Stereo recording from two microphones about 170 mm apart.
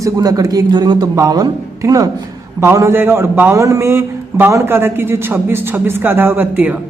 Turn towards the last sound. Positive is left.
turn(degrees=-10)  # may be behind; listen again after turning